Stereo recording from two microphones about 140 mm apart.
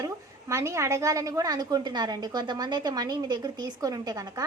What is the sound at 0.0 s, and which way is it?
A woman's voice, 20° right (ahead or behind).